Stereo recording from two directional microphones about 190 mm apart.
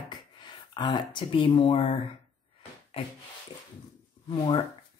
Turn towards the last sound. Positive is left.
turn(degrees=25)  # may be behind; listen again after turning